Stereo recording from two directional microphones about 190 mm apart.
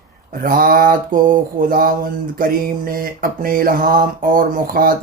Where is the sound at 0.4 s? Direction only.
50° right (ahead or behind).